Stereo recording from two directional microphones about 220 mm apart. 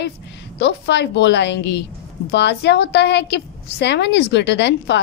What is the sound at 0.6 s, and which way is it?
Speech, 50° left (ahead or behind).